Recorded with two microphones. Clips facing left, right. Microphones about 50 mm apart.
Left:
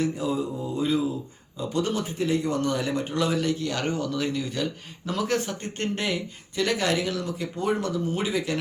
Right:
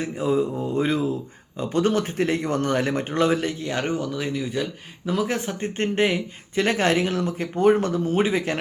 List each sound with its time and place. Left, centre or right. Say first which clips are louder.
0.0 s speech: right 3 dB; right; by 5.2 s centre
5.2 s speech: left 3 dB; right